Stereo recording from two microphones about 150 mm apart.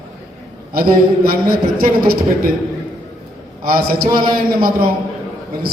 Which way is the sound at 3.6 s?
80° right.